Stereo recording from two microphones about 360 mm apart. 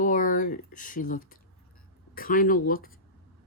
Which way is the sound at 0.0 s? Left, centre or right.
Left.